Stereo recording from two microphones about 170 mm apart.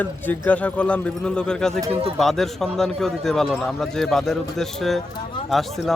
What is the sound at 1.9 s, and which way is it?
Speech, 35° right (ahead or behind).